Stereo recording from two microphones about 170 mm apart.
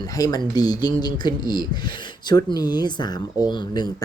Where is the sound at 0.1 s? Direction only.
20° left (ahead or behind).